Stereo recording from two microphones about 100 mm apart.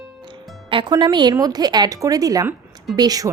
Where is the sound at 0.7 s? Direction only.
60° right (ahead or behind).